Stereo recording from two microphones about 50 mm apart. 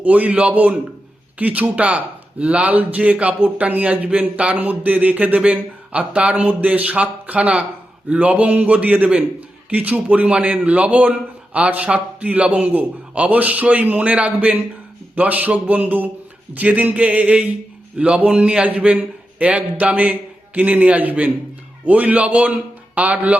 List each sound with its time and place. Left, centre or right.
0.0 s a man's voice: right
11.1 s a sound: right
11.7 s a man's voice: right